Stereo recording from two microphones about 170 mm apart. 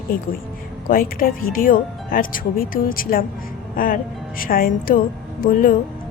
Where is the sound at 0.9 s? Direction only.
55° left (ahead or behind).